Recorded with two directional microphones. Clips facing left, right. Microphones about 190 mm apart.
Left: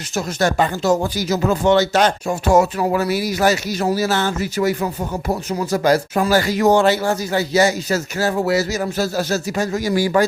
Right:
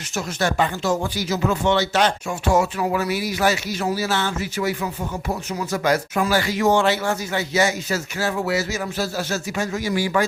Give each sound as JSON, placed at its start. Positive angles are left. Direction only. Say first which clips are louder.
{"t": 0.2, "sound": "speech", "louder": "left 4 dB", "side_deg": 40}